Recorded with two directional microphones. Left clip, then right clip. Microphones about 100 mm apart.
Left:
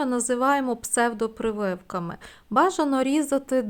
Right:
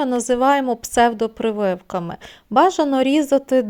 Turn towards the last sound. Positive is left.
turn(degrees=-25)  # may be behind; listen again after turning